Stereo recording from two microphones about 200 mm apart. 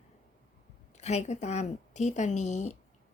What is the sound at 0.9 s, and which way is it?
A woman's voice, 35° left (ahead or behind).